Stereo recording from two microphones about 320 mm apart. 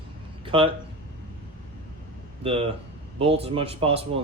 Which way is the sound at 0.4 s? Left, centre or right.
Centre.